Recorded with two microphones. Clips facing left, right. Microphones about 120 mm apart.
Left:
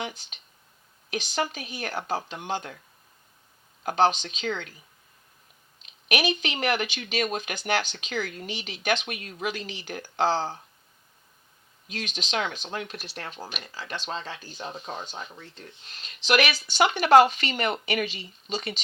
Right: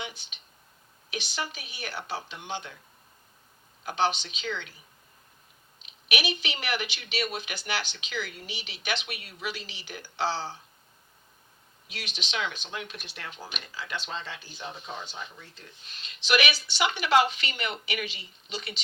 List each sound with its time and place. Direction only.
1.1 s speech: 45° left (ahead or behind)
3.8 s speech: 45° left (ahead or behind)
6.1 s speech: 45° left (ahead or behind)
11.9 s speech: 45° left (ahead or behind)
16.0 s speech: 45° left (ahead or behind)